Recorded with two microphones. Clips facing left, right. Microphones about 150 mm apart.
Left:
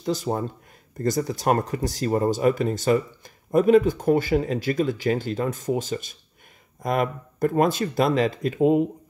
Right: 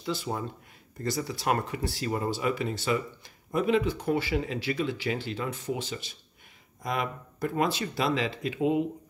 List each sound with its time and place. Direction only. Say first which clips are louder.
0.0 s speech: left 7 dB; 40° left (ahead or behind)